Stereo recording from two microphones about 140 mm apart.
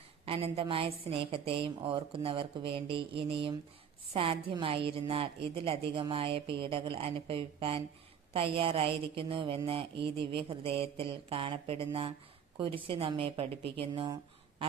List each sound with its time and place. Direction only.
0.3 s a woman's voice: 40° right (ahead or behind)